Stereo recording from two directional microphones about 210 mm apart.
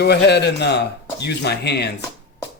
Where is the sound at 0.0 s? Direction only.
50° left (ahead or behind).